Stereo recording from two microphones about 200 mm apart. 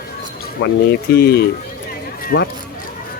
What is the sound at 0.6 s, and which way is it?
Speech, 55° left (ahead or behind).